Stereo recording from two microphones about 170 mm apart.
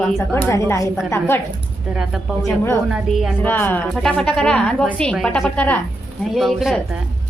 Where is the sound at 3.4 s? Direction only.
10° left (ahead or behind).